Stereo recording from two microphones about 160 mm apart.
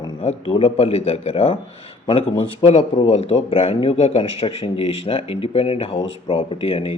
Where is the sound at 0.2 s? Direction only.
40° left (ahead or behind).